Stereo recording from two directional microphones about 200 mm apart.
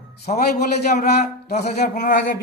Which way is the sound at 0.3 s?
40° left (ahead or behind).